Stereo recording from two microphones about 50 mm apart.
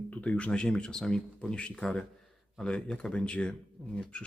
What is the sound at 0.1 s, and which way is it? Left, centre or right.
Speech, left.